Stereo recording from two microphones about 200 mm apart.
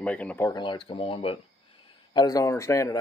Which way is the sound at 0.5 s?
25° left (ahead or behind).